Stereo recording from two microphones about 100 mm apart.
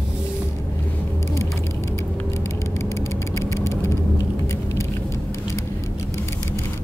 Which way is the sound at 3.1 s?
30° left (ahead or behind).